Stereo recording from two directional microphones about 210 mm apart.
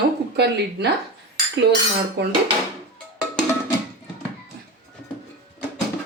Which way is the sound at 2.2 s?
50° right (ahead or behind).